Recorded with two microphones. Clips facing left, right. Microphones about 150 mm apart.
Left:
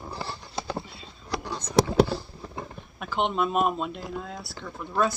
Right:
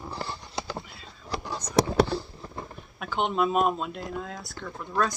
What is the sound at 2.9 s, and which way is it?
Speech, centre (ahead or behind).